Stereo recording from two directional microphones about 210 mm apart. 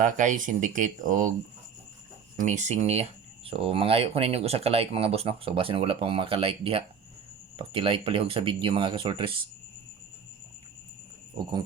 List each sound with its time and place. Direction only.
0.0 s speech: 35° right (ahead or behind)
2.4 s speech: 35° right (ahead or behind)